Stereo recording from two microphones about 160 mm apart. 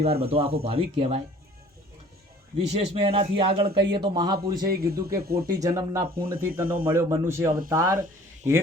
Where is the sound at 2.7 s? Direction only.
35° right (ahead or behind).